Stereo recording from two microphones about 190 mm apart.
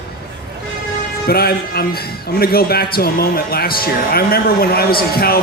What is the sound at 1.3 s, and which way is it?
Speech, 55° left (ahead or behind).